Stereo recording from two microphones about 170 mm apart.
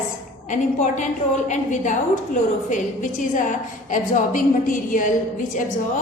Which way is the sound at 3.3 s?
50° left (ahead or behind).